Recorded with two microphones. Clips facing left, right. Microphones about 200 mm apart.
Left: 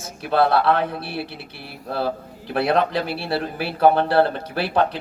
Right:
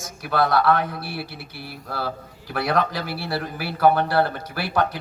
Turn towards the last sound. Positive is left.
turn(degrees=25)  # may be behind; listen again after turning